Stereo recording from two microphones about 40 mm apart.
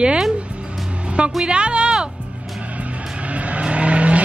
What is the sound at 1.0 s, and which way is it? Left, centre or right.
Music, right.